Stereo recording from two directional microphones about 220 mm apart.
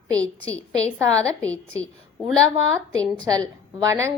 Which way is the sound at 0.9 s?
15° right (ahead or behind).